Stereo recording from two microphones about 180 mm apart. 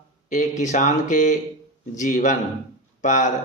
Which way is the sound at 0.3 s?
45° left (ahead or behind).